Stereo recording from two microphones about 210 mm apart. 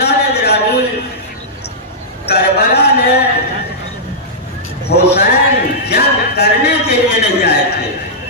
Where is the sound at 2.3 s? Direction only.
50° left (ahead or behind).